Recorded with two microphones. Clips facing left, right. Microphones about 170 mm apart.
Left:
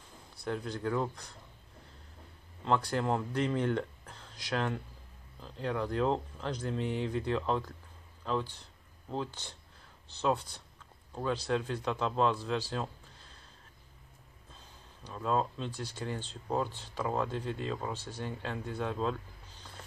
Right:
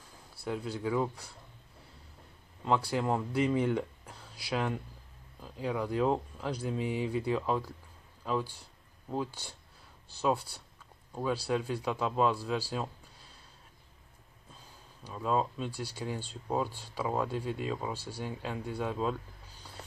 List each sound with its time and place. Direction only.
0.4 s speech: 5° right (ahead or behind)
2.6 s speech: 10° right (ahead or behind)
15.0 s speech: 5° right (ahead or behind)